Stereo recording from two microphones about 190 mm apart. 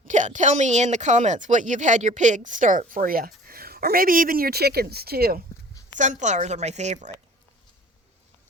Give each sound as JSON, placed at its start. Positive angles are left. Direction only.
{"t": 0.1, "sound": "speech", "side_deg": -40}
{"t": 6.0, "sound": "a woman's voice", "side_deg": -40}